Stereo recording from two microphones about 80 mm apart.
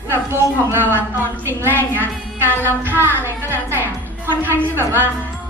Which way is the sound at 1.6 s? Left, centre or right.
Right.